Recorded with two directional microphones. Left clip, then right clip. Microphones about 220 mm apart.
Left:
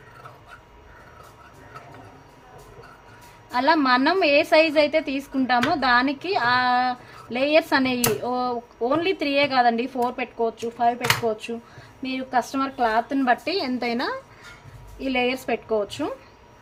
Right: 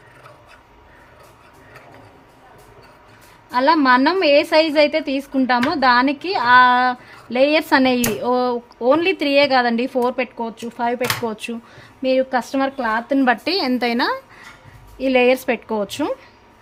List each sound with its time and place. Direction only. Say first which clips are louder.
3.5 s a woman's voice: right 5 dB; 40° right (ahead or behind)